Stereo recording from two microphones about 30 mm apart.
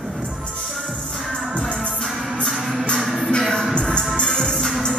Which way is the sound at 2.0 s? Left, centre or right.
Centre.